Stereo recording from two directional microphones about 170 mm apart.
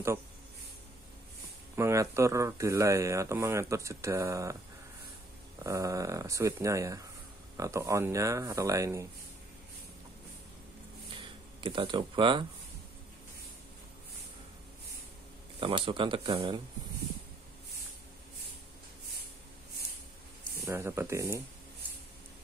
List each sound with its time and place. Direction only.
1.8 s speech: 15° right (ahead or behind)
5.6 s speech: 20° right (ahead or behind)
11.1 s speech: 30° right (ahead or behind)
15.6 s speech: 30° right (ahead or behind)
20.6 s speech: 15° right (ahead or behind)